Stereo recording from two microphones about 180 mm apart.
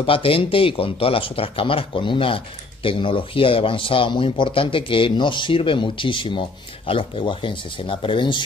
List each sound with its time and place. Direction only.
0.0 s speech: 30° left (ahead or behind)